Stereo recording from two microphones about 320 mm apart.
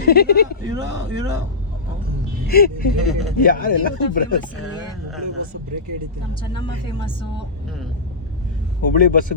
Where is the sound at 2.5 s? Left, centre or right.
Left.